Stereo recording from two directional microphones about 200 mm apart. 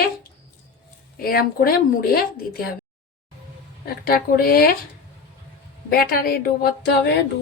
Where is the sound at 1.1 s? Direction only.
50° left (ahead or behind).